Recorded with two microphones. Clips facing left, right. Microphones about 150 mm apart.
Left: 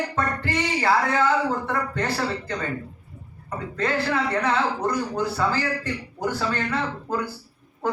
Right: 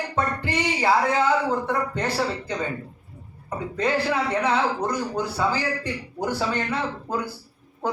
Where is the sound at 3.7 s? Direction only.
15° right (ahead or behind).